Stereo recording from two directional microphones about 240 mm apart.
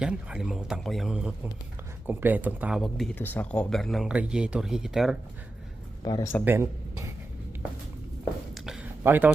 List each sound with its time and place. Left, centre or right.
0.0 s speech: centre
6.0 s speech: centre
6.4 s speech: centre
8.5 s a sound: centre